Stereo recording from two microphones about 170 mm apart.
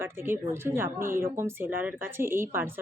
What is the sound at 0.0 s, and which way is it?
Speech, 15° right (ahead or behind).